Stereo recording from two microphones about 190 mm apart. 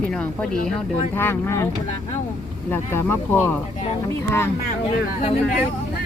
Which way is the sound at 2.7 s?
10° left (ahead or behind).